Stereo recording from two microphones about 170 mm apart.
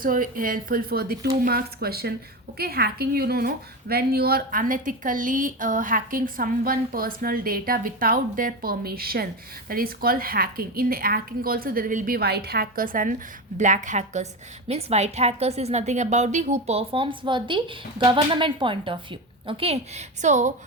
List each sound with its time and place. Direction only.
0.0 s a woman's voice: 55° right (ahead or behind)